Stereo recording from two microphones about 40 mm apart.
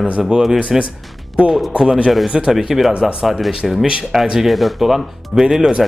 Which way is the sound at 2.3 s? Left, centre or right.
Right.